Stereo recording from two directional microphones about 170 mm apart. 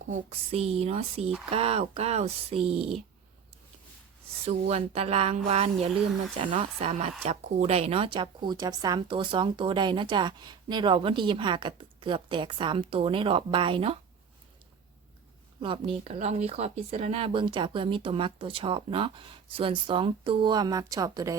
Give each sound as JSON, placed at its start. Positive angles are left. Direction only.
{"t": 0.1, "sound": "speech", "side_deg": -35}
{"t": 4.4, "sound": "speech", "side_deg": -40}
{"t": 15.6, "sound": "speech", "side_deg": -30}